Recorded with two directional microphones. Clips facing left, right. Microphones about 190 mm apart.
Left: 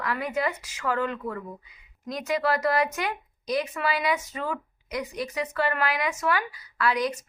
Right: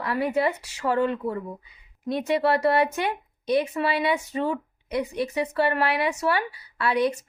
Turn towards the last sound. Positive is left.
turn(degrees=-25)  # may be behind; listen again after turning